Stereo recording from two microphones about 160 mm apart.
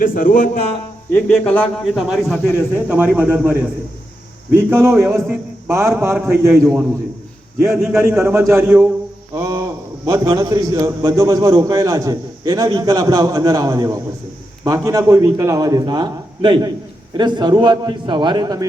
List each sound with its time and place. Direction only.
0.0 s speech: 60° left (ahead or behind)
1.1 s a man's voice: 10° left (ahead or behind)
2.3 s speech: 15° left (ahead or behind)
2.7 s a man's voice: 10° right (ahead or behind)
6.5 s a man's voice: centre (ahead or behind)
7.9 s a man's voice: 15° right (ahead or behind)
9.3 s mantra: 20° right (ahead or behind)
10.1 s a man's voice: 25° right (ahead or behind)